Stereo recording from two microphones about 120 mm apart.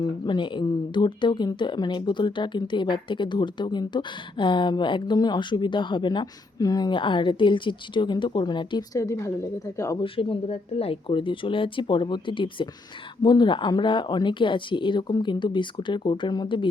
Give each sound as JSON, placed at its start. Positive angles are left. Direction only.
{"t": 0.0, "sound": "speech", "side_deg": 40}
{"t": 9.0, "sound": "a woman's voice", "side_deg": 25}
{"t": 10.0, "sound": "speech", "side_deg": 50}